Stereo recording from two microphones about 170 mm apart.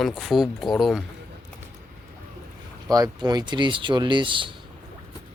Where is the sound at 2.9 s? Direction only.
25° right (ahead or behind).